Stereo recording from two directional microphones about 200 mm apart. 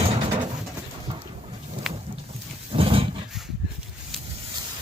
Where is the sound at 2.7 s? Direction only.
25° right (ahead or behind).